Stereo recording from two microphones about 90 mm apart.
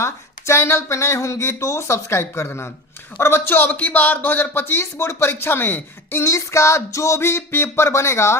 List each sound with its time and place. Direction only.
0.0 s speech: 30° left (ahead or behind)